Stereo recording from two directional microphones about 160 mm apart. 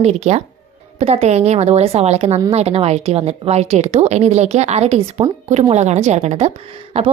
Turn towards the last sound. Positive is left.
turn(degrees=-35)  # may be behind; listen again after turning